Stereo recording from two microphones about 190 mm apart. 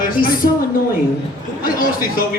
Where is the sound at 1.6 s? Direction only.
50° left (ahead or behind).